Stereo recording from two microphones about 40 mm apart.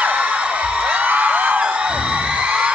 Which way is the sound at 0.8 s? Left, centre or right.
Right.